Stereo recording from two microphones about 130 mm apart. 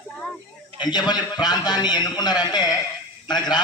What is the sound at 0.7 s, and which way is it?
A man's voice, 35° left (ahead or behind).